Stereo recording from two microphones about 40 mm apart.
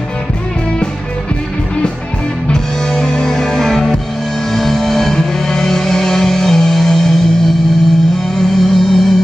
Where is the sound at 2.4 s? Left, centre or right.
Centre.